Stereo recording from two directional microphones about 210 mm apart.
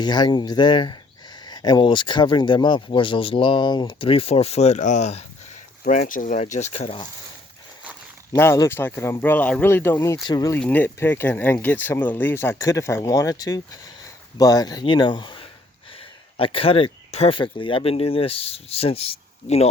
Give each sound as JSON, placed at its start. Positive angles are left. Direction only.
{"t": 0.0, "sound": "speech", "side_deg": 20}
{"t": 8.3, "sound": "speech", "side_deg": 10}